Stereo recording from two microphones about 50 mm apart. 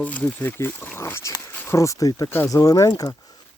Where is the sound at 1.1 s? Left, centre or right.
Left.